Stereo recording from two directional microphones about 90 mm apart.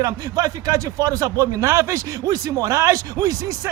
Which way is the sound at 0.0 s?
40° right (ahead or behind).